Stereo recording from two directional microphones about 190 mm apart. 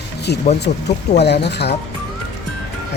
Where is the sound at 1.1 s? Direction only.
60° left (ahead or behind).